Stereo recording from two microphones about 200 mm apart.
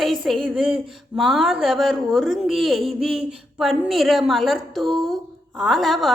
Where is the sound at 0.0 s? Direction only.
Centre (ahead or behind).